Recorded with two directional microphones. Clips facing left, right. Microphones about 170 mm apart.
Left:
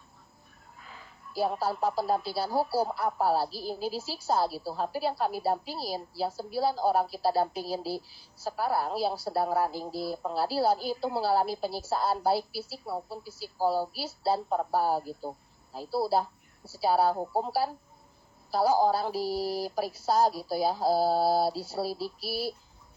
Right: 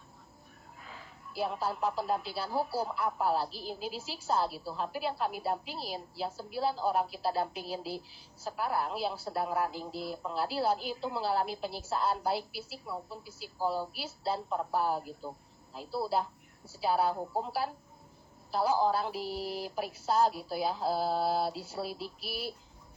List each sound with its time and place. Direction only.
1.3 s speech: 40° left (ahead or behind)